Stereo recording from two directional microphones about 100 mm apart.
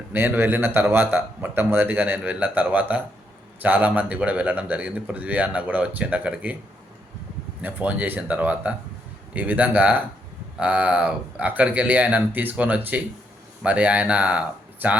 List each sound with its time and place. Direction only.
0.1 s speech: 20° right (ahead or behind)
7.6 s speech: 15° right (ahead or behind)